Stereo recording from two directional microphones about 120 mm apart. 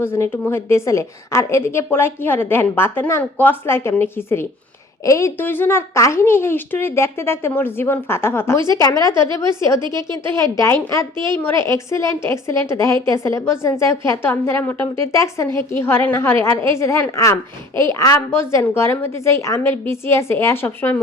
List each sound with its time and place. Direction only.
0.0 s a woman's voice: 20° left (ahead or behind)